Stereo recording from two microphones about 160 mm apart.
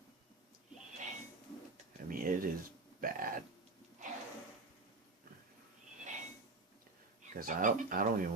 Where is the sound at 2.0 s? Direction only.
60° right (ahead or behind).